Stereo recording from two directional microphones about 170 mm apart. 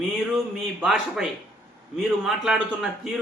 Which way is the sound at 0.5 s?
Centre (ahead or behind).